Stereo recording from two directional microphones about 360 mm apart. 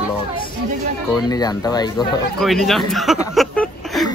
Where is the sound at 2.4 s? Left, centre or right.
Centre.